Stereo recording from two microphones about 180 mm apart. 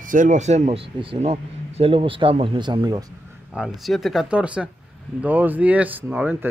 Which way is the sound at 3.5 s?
Centre (ahead or behind).